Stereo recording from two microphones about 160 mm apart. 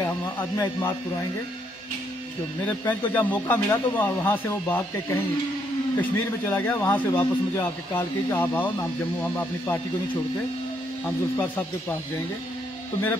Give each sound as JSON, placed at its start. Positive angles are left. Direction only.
{"t": 0.0, "sound": "speech", "side_deg": 20}
{"t": 2.8, "sound": "speech", "side_deg": 10}